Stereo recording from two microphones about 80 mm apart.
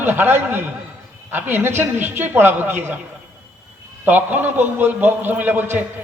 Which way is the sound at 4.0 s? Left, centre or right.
Right.